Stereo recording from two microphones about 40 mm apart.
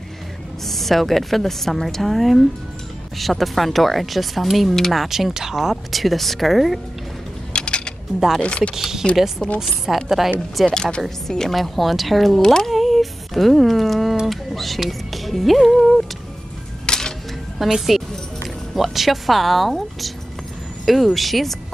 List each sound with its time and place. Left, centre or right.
0.7 s a woman's voice: centre
5.0 s speech: centre
7.5 s a sound: left
8.4 s speech: left
8.7 s a woman's voice: centre
9.4 s speech: centre
9.8 s a woman's voice: centre
10.7 s a woman's voice: centre
12.4 s speech: centre
16.8 s music: centre
17.6 s speech: centre